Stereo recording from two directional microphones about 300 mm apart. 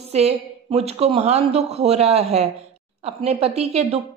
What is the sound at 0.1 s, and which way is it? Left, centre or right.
A woman's voice, right.